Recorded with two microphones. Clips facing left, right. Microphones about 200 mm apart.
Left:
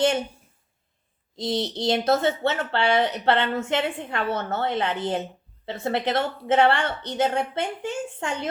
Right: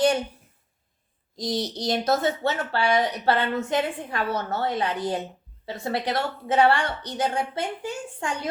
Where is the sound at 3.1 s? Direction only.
25° left (ahead or behind).